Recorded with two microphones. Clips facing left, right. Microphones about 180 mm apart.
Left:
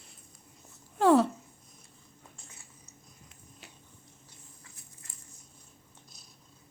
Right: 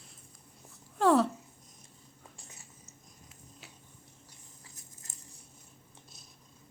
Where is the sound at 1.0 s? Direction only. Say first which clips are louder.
Left 2 dB; centre (ahead or behind).